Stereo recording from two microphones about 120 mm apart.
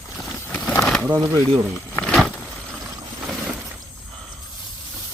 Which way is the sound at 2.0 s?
5° left (ahead or behind).